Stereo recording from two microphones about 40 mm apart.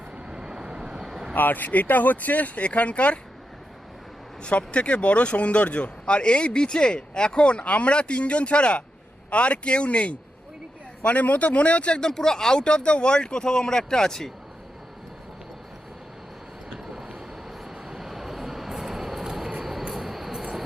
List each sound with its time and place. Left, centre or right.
0.2 s vehicle: centre
1.4 s speech: left
4.4 s speech: left
11.9 s speech: centre
17.7 s vehicle: centre
19.9 s train: centre